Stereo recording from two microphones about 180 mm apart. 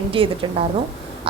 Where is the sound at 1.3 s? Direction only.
30° right (ahead or behind).